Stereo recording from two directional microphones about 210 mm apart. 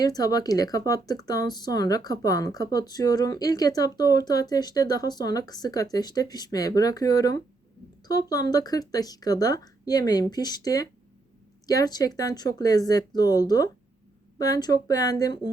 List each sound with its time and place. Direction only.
0.0 s speech: 20° left (ahead or behind)